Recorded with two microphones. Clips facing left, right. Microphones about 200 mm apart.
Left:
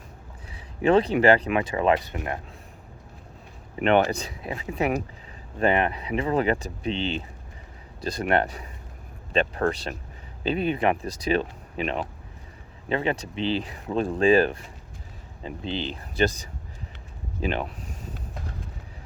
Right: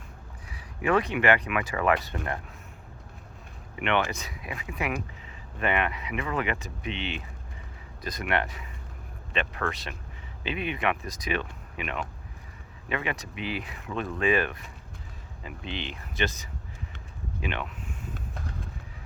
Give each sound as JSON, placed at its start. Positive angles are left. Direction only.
{"t": 0.5, "sound": "speech", "side_deg": 30}
{"t": 3.8, "sound": "speech", "side_deg": 40}
{"t": 17.4, "sound": "speech", "side_deg": 35}